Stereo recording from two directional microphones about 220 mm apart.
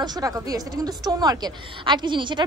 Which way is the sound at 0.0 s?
15° right (ahead or behind).